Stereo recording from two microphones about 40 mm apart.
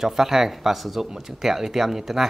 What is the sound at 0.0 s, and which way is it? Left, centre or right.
Speech, centre.